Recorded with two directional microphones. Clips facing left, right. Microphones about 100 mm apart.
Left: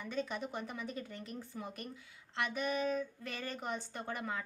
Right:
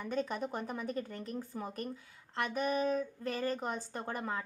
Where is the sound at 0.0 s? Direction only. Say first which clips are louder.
Right 3 dB; 45° right (ahead or behind).